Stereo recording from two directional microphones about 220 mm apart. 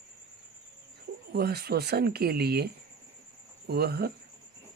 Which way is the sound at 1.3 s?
45° right (ahead or behind).